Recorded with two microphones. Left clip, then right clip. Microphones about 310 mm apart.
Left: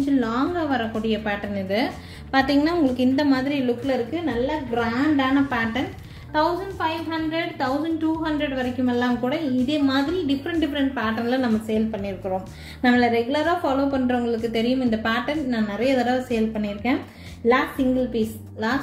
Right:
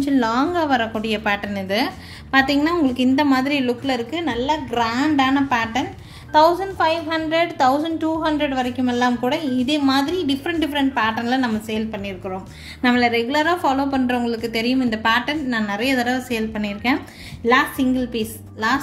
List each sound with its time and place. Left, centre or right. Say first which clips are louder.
0.0 s a woman's voice: right 4 dB; right
12.8 s a woman's voice: right 2 dB; right